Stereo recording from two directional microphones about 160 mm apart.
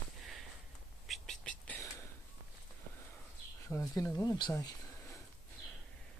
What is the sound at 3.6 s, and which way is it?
Speech, 20° left (ahead or behind).